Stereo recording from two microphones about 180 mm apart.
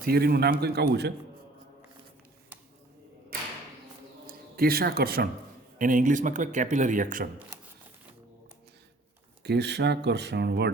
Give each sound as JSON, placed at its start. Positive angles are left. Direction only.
{"t": 0.0, "sound": "a man's voice", "side_deg": -60}
{"t": 4.3, "sound": "speech", "side_deg": -55}
{"t": 5.8, "sound": "speech", "side_deg": -45}
{"t": 9.4, "sound": "speech", "side_deg": -70}